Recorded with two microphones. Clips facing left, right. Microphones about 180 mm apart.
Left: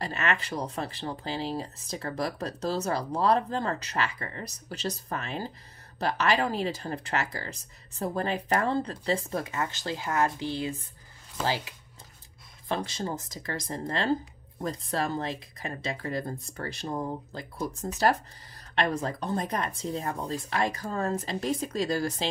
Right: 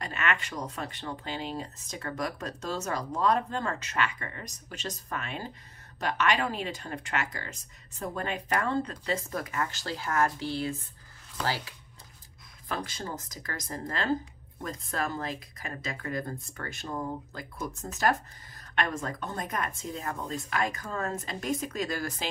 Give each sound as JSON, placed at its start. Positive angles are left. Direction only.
{"t": 0.0, "sound": "speech", "side_deg": 35}